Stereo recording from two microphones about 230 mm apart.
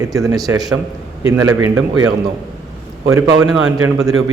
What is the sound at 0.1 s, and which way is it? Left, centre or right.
Speech, centre.